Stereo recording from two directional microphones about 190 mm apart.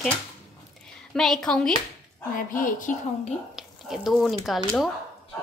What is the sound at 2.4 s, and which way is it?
Speech, 45° left (ahead or behind).